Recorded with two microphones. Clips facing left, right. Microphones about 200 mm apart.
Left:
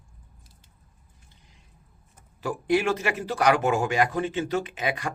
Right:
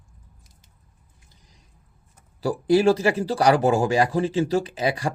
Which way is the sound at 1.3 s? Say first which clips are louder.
Right 2 dB; 40° right (ahead or behind).